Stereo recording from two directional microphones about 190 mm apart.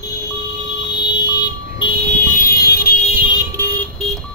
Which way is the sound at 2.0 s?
45° left (ahead or behind).